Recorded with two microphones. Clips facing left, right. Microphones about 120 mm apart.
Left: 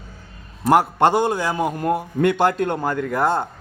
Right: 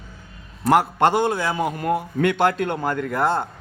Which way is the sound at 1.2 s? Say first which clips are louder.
Left 1 dB; 15° left (ahead or behind).